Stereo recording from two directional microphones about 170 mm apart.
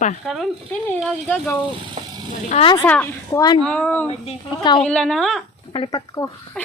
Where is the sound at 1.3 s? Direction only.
10° left (ahead or behind).